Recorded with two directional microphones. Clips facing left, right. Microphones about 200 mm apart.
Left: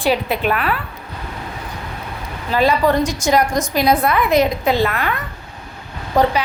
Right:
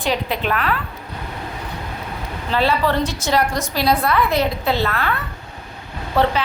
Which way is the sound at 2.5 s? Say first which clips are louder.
Left 3 dB; 15° left (ahead or behind).